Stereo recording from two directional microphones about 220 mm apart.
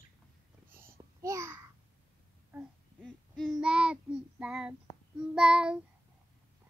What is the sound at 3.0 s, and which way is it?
Child singing, centre (ahead or behind).